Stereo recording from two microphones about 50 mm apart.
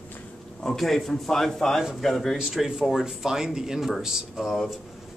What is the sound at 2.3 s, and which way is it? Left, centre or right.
Speech, centre.